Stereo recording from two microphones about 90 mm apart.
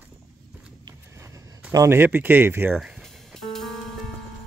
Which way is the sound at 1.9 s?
25° right (ahead or behind).